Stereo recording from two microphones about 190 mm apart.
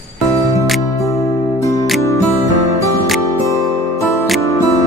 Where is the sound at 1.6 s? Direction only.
15° left (ahead or behind).